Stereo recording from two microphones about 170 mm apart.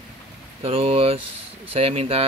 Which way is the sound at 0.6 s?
35° right (ahead or behind).